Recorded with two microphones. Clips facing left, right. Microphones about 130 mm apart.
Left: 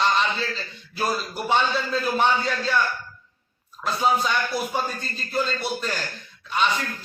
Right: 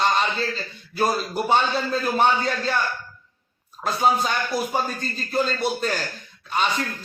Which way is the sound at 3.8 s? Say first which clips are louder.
Right 1 dB; 40° right (ahead or behind).